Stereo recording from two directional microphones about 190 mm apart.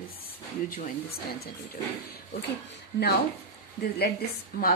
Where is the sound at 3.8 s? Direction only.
55° left (ahead or behind).